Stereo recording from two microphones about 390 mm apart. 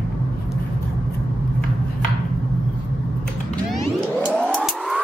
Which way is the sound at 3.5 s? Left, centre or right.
Centre.